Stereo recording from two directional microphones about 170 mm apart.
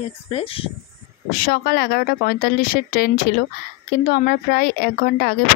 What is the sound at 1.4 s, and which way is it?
Speech, 65° left (ahead or behind).